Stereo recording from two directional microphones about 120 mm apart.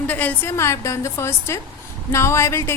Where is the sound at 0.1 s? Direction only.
15° left (ahead or behind).